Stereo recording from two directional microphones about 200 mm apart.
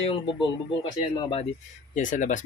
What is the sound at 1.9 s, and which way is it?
Speech, 40° left (ahead or behind).